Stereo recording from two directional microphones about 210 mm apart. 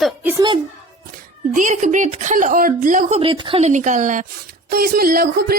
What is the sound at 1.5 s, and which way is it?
Speech, 35° right (ahead or behind).